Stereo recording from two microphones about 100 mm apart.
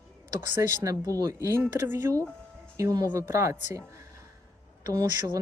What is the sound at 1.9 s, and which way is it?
Speech, 25° right (ahead or behind).